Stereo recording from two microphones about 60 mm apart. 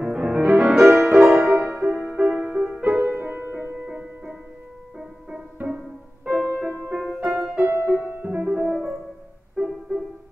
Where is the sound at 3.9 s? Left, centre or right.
Right.